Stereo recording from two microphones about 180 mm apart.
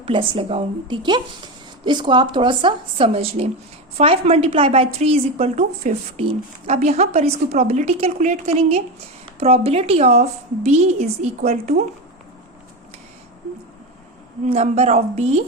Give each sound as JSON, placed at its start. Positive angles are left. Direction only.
{"t": 0.0, "sound": "a woman's voice", "side_deg": -30}
{"t": 14.4, "sound": "a woman's voice", "side_deg": -35}